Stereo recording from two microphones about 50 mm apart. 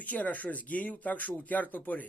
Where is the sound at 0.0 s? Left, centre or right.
Left.